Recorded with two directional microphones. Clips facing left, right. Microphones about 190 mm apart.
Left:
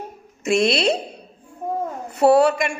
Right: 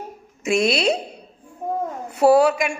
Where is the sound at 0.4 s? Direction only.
Centre (ahead or behind).